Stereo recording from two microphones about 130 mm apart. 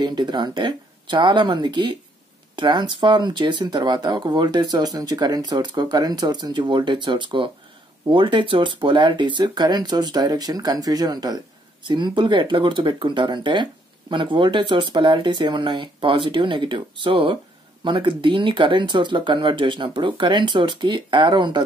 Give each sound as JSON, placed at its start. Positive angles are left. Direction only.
{"t": 0.0, "sound": "speech", "side_deg": -35}